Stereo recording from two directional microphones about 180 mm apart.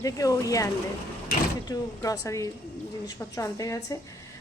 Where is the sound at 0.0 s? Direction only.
20° left (ahead or behind).